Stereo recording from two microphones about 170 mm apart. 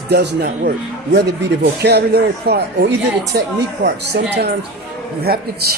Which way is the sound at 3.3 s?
70° right (ahead or behind).